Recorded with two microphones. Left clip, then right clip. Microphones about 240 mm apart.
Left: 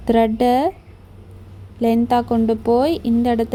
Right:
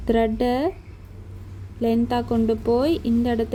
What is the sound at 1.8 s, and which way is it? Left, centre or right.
A woman's voice, centre.